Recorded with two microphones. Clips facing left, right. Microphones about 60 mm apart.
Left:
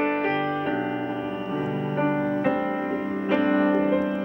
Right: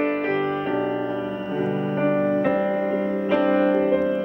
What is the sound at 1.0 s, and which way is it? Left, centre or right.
Music, centre.